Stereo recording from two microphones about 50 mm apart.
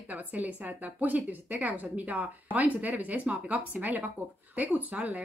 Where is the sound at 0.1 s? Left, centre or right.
Right.